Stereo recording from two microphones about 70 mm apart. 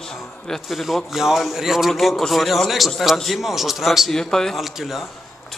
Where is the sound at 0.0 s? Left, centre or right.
Centre.